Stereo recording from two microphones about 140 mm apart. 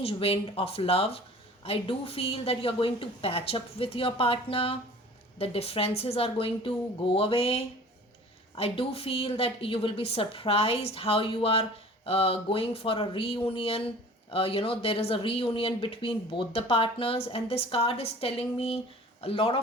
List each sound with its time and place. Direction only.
0.0 s a woman's voice: 45° left (ahead or behind)